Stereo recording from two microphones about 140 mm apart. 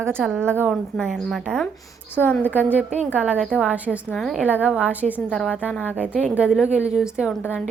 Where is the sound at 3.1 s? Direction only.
10° right (ahead or behind).